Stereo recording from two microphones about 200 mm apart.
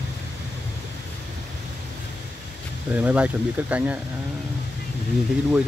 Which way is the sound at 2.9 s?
5° right (ahead or behind).